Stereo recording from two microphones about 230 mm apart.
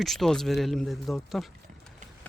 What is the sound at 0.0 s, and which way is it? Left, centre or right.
Speech, centre.